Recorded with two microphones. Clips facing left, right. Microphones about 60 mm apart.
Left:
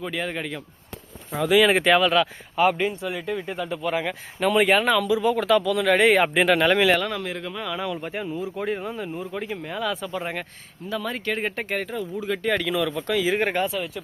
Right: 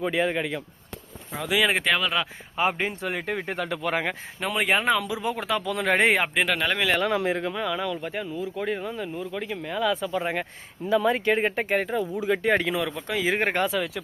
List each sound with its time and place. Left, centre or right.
0.0 s speech: centre
2.6 s speech: right
2.9 s speech: right
4.4 s speech: centre
4.8 s speech: centre
5.6 s speech: right
6.1 s speech: centre
7.0 s speech: centre
7.5 s speech: centre
10.8 s speech: centre
12.5 s speech: right
13.2 s speech: right